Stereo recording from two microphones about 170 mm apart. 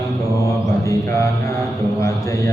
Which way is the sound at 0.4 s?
20° left (ahead or behind).